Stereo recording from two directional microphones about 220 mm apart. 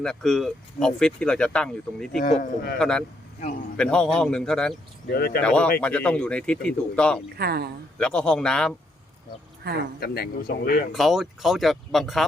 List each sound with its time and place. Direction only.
0.0 s speech: centre (ahead or behind)
2.1 s speech: 35° left (ahead or behind)
2.7 s speech: 5° left (ahead or behind)
5.0 s speech: 45° left (ahead or behind)
5.4 s speech: 5° left (ahead or behind)
7.3 s speech: 45° right (ahead or behind)
7.9 s speech: 5° left (ahead or behind)
9.6 s speech: 45° right (ahead or behind)
10.0 s speech: 45° left (ahead or behind)
10.9 s speech: centre (ahead or behind)